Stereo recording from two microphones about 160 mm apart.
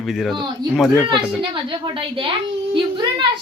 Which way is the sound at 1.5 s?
30° right (ahead or behind).